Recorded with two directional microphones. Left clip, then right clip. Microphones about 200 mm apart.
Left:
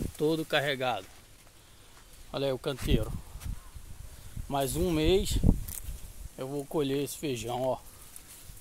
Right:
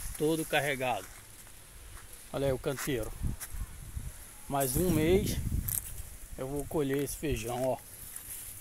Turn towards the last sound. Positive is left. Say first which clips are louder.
# left 1 dB
turn(degrees=15)  # may be behind; listen again after turning